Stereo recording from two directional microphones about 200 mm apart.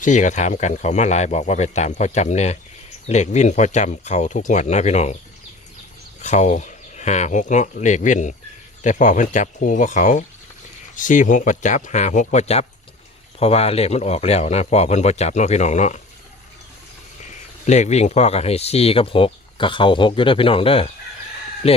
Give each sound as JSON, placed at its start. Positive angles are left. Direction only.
{"t": 0.0, "sound": "speech", "side_deg": 40}
{"t": 6.2, "sound": "speech", "side_deg": 35}
{"t": 17.7, "sound": "speech", "side_deg": 35}